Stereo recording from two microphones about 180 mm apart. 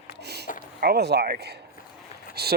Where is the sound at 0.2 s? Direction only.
65° right (ahead or behind).